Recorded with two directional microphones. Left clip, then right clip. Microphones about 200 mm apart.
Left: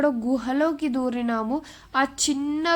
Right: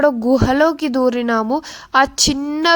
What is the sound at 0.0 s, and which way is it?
Speech, 40° right (ahead or behind).